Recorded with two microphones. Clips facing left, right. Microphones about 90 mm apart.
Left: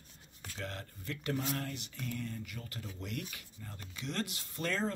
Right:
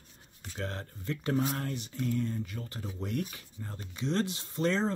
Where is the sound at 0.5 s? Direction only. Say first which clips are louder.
Right 5 dB; 30° right (ahead or behind).